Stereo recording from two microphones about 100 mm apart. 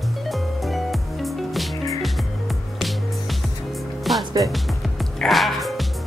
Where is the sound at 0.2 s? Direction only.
Centre (ahead or behind).